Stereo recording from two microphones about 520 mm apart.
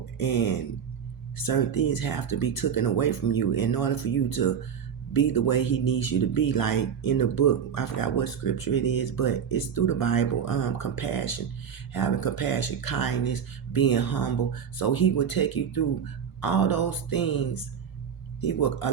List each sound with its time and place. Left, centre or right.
0.2 s speech: left